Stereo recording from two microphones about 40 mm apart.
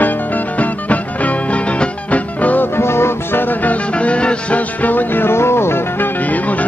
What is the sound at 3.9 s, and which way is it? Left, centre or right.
Music, left.